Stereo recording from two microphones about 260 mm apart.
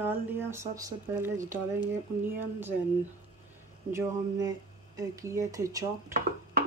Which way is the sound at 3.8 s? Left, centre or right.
Centre.